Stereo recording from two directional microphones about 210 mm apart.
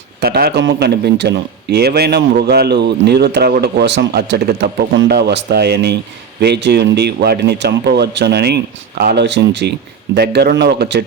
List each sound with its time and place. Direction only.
0.2 s a man's voice: 45° right (ahead or behind)